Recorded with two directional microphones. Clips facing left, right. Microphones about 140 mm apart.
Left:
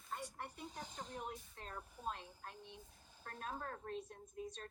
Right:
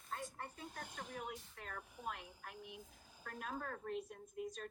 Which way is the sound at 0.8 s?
10° right (ahead or behind).